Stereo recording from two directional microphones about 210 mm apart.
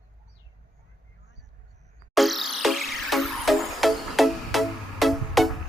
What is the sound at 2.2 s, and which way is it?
Music, centre (ahead or behind).